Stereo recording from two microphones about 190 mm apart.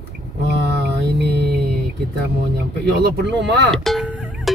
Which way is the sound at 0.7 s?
60° right (ahead or behind).